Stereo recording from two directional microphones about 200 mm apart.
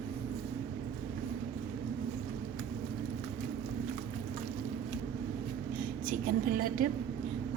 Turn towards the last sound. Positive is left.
turn(degrees=-45)  # may be behind; listen again after turning